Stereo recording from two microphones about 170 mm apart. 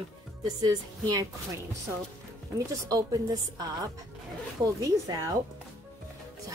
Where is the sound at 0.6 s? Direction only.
25° right (ahead or behind).